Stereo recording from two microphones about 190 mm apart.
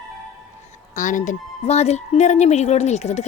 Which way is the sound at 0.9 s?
40° left (ahead or behind).